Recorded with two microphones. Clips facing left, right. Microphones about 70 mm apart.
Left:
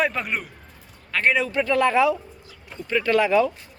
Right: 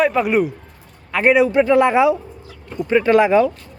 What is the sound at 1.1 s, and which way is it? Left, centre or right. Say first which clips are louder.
A man's voice: right 8 dB; centre.